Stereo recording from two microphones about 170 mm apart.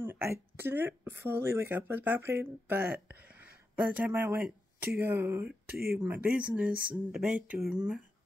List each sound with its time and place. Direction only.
0.0 s speech: 15° right (ahead or behind)
5.7 s speech: 65° right (ahead or behind)
5.9 s speech: 5° right (ahead or behind)